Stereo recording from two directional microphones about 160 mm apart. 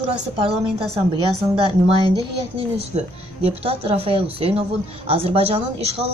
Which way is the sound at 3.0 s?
40° right (ahead or behind).